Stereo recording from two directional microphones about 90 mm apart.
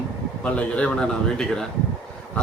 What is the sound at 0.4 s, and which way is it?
A man's voice, 15° left (ahead or behind).